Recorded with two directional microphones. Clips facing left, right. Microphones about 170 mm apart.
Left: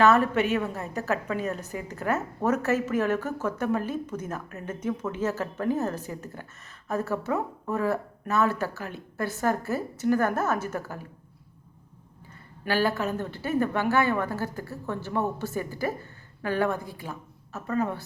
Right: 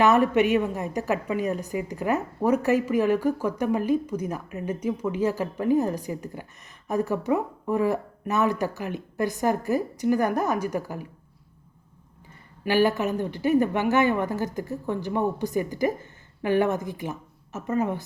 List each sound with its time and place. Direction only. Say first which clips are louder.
0.0 s a woman's voice: right 2 dB; 15° right (ahead or behind)
12.6 s a woman's voice: right 4 dB; 15° right (ahead or behind)